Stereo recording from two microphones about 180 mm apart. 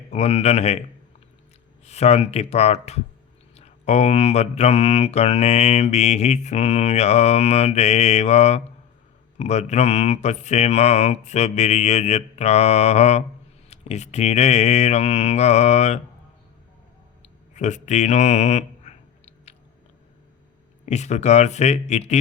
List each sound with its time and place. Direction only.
0.1 s mantra: 35° left (ahead or behind)
17.2 s a sound: 40° left (ahead or behind)
20.8 s mantra: 40° left (ahead or behind)